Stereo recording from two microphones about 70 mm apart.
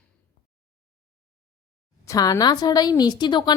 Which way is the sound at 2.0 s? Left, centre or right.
Left.